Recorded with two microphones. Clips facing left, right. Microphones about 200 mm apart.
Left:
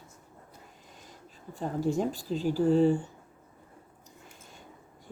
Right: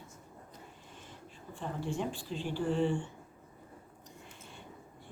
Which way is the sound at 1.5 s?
40° left (ahead or behind).